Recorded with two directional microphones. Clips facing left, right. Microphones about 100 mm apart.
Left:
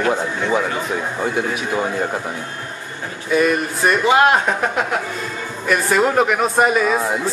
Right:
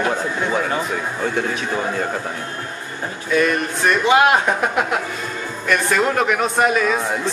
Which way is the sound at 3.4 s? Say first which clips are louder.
Left 1 dB; 5° left (ahead or behind).